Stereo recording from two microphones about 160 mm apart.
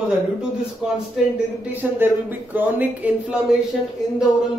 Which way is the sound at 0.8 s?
5° right (ahead or behind).